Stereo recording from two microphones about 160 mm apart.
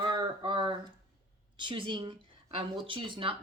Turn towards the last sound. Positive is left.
turn(degrees=-30)  # may be behind; listen again after turning